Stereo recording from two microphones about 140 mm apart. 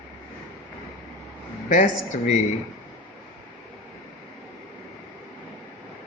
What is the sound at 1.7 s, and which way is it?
Speech, 65° left (ahead or behind).